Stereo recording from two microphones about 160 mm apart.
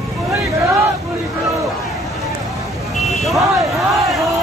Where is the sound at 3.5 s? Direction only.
Centre (ahead or behind).